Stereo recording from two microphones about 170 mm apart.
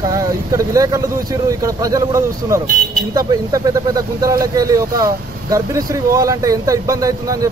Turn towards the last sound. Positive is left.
turn(degrees=-20)  # may be behind; listen again after turning